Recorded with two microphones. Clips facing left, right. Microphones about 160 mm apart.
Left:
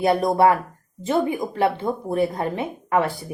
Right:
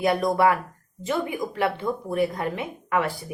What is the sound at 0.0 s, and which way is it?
A woman's voice, 30° left (ahead or behind).